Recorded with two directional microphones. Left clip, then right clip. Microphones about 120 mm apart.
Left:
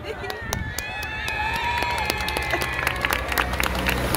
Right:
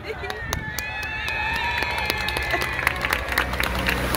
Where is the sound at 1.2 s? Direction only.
40° left (ahead or behind).